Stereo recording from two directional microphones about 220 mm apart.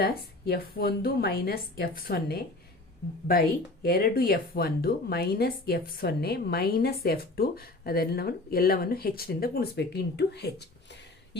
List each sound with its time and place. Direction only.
0.0 s a woman's voice: 45° left (ahead or behind)
3.8 s a woman's voice: 40° left (ahead or behind)